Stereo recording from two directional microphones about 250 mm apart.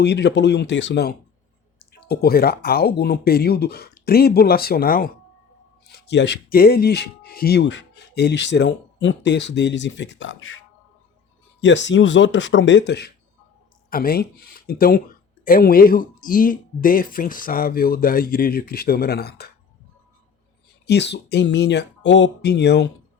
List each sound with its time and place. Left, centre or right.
0.0 s speech: left
11.6 s speech: left
20.8 s speech: left